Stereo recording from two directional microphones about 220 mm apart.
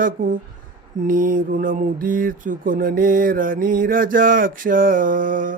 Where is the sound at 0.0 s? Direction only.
35° right (ahead or behind).